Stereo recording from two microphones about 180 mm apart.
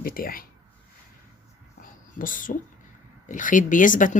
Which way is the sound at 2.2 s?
50° left (ahead or behind).